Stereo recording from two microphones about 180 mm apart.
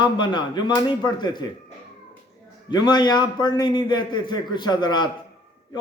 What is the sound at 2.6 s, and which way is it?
A man's voice, 25° left (ahead or behind).